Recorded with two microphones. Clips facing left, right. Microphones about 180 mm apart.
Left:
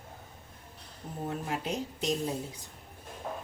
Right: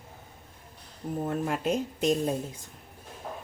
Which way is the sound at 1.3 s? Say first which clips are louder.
Right 5 dB; 50° right (ahead or behind).